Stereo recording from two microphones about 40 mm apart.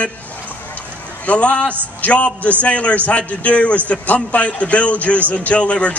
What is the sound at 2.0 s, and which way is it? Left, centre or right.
A man's voice, left.